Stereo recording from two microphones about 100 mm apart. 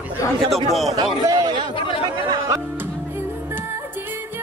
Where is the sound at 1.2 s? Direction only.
45° right (ahead or behind).